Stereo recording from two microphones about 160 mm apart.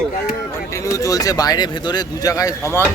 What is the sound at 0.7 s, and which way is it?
Speech, 20° left (ahead or behind).